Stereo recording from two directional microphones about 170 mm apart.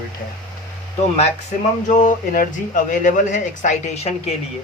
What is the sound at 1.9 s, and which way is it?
Speech, 50° left (ahead or behind).